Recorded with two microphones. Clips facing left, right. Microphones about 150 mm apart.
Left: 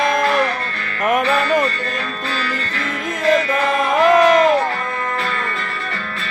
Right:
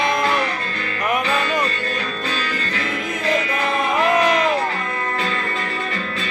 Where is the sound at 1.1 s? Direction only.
45° left (ahead or behind).